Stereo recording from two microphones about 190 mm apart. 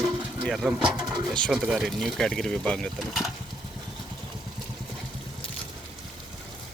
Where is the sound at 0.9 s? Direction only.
20° right (ahead or behind).